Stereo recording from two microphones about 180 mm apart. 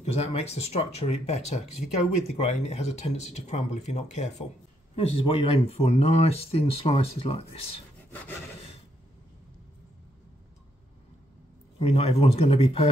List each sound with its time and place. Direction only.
0.0 s speech: 35° left (ahead or behind)
11.8 s speech: 35° left (ahead or behind)